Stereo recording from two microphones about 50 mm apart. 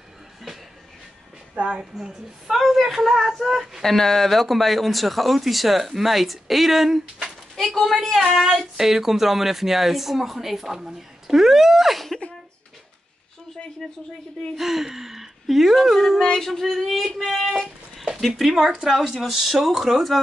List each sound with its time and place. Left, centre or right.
1.5 s a woman's voice: right
1.8 s speech: centre
3.8 s speech: centre
13.8 s speech: centre
16.0 s a sound: centre
16.7 s speech: centre
18.5 s speech: centre
18.9 s speech: centre